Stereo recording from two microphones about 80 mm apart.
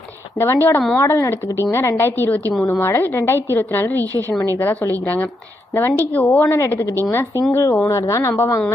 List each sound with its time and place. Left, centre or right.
0.3 s a woman's voice: left